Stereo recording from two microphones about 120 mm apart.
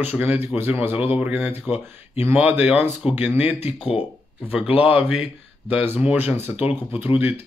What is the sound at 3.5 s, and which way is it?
Speech, 55° left (ahead or behind).